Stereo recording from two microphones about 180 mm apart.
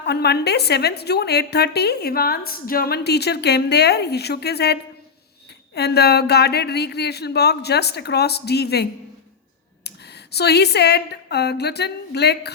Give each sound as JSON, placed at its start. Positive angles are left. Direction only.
{"t": 0.0, "sound": "a woman's voice", "side_deg": 65}
{"t": 10.3, "sound": "a woman's voice", "side_deg": 65}